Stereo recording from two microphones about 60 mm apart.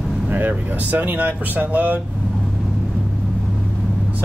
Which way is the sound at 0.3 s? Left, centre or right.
Right.